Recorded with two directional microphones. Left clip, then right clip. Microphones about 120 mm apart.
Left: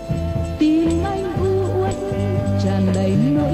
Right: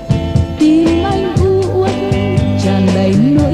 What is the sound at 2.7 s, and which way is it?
Music, 40° right (ahead or behind).